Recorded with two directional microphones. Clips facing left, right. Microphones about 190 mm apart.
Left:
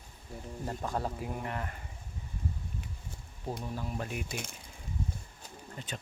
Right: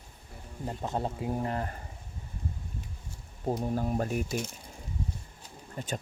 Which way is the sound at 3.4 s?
40° right (ahead or behind).